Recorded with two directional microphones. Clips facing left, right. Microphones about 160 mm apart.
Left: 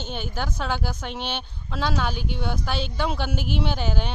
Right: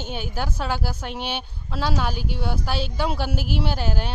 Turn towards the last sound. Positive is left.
turn(degrees=-5)  # may be behind; listen again after turning